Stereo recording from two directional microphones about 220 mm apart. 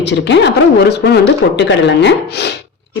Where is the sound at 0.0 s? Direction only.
50° left (ahead or behind).